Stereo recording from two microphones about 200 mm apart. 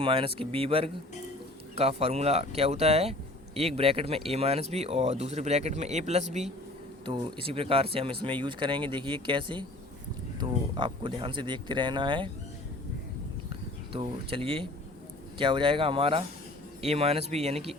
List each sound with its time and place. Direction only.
0.0 s speech: 25° right (ahead or behind)
10.8 s speech: 25° right (ahead or behind)
13.9 s speech: 25° right (ahead or behind)